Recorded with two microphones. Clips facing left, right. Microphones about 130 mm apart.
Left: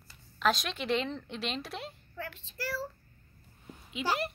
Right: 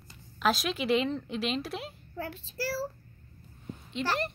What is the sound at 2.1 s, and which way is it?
Speech, 35° right (ahead or behind).